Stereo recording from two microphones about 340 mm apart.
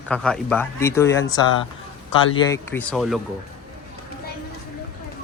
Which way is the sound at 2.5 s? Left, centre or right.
Centre.